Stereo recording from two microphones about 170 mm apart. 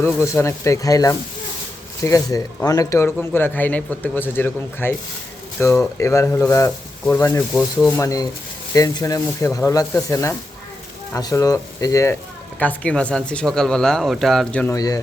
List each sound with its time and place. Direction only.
0.0 s a man's voice: 15° left (ahead or behind)
12.5 s speech: 10° left (ahead or behind)
14.7 s speech: 20° left (ahead or behind)